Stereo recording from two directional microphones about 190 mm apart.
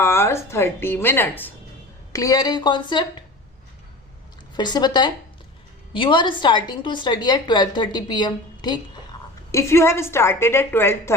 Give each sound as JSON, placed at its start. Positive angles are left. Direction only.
{"t": 0.0, "sound": "a woman's voice", "side_deg": 15}
{"t": 4.5, "sound": "a woman's voice", "side_deg": 20}